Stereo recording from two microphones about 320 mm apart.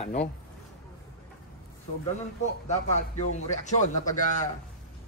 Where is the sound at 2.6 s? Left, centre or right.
Left.